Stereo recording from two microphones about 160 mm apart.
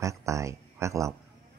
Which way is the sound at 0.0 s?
20° right (ahead or behind).